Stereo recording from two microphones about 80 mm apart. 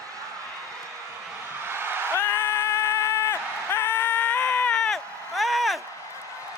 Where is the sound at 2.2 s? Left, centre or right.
Left; by 5.8 s centre.